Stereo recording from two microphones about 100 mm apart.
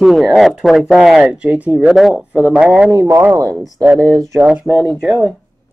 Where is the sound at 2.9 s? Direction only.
35° right (ahead or behind).